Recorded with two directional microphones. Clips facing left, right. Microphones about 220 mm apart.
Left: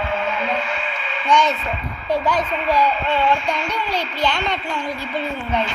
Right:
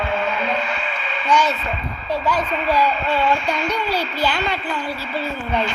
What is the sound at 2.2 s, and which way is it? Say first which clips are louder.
Speech: even; 5° right (ahead or behind).